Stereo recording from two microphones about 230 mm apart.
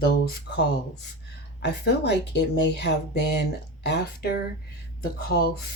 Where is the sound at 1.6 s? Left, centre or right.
Left.